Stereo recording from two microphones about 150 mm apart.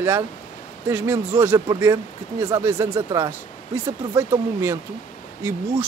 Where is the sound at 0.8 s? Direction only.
15° right (ahead or behind).